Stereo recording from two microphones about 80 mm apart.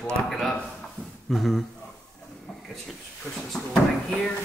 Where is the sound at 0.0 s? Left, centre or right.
Centre.